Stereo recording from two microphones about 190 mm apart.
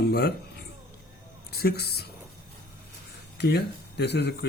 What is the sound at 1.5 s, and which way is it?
Speech, 55° left (ahead or behind).